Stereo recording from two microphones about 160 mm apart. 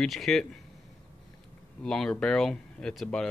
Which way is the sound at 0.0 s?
Centre (ahead or behind).